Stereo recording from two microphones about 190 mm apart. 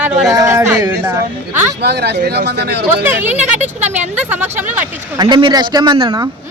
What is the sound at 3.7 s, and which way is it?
Speech, 35° right (ahead or behind).